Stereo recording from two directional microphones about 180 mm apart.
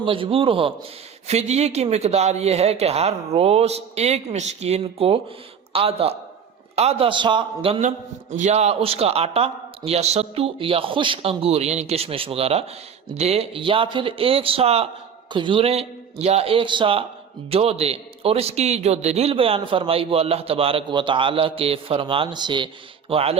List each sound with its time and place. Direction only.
0.0 s a man's voice: 30° right (ahead or behind)
7.8 s a man's voice: 40° right (ahead or behind)